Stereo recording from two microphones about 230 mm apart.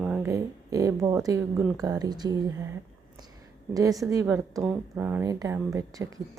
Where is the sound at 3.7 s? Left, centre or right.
Centre.